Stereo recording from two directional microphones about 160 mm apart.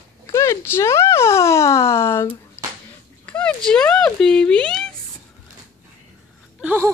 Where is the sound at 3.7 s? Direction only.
5° left (ahead or behind).